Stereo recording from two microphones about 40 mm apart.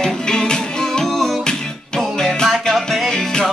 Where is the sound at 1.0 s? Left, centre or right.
Centre.